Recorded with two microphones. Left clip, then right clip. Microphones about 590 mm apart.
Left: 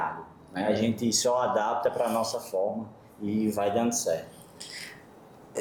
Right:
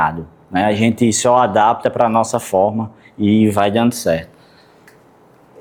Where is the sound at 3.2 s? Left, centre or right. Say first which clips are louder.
Right 13 dB; right.